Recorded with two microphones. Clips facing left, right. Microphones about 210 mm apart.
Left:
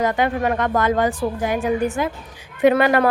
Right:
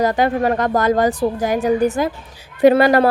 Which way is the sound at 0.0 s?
35° right (ahead or behind).